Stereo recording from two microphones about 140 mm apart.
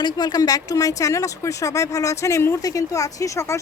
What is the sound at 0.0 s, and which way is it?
Speech, 30° left (ahead or behind).